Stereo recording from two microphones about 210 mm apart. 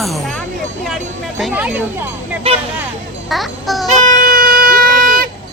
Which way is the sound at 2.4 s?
25° right (ahead or behind).